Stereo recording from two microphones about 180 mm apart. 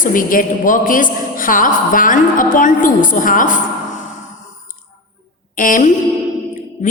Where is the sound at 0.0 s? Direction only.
50° left (ahead or behind).